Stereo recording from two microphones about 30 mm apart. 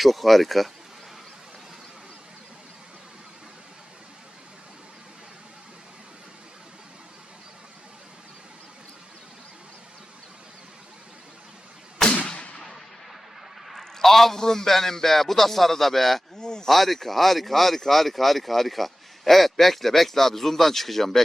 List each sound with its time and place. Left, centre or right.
0.0 s speech: centre
12.3 s a sound: left
12.5 s artillery fire: centre
13.7 s a man's voice: centre
16.4 s speech: left
16.6 s speech: centre